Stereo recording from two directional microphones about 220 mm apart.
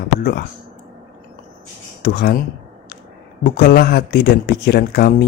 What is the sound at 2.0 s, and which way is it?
Speech, 50° left (ahead or behind).